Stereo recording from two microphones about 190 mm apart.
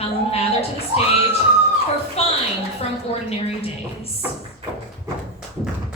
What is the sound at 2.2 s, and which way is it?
Speech, 30° left (ahead or behind).